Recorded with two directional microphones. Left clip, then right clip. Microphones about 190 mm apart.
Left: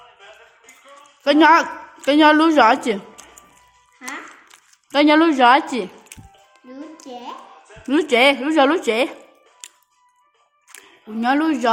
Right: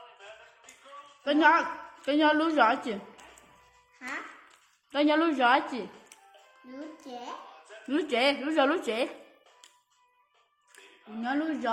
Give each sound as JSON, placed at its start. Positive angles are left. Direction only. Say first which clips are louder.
{"t": 1.2, "sound": "a woman's voice", "louder": "left 10 dB", "side_deg": 55}
{"t": 4.4, "sound": "a sound", "louder": "left 9 dB", "side_deg": 50}
{"t": 7.1, "sound": "a sound", "louder": "left 7 dB", "side_deg": 5}
{"t": 7.9, "sound": "speech", "louder": "left 12 dB", "side_deg": 45}
{"t": 9.6, "sound": "music", "louder": "left 17 dB", "side_deg": 60}
{"t": 11.2, "sound": "speech", "louder": "left 13 dB", "side_deg": 65}